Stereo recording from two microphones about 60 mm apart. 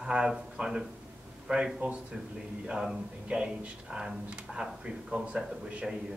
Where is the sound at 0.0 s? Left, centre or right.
Centre.